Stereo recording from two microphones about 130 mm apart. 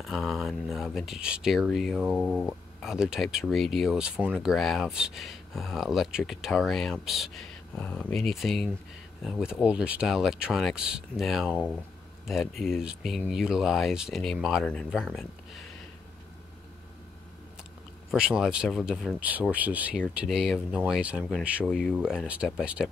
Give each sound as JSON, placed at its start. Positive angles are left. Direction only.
{"t": 0.0, "sound": "speech", "side_deg": 0}
{"t": 18.1, "sound": "speech", "side_deg": -5}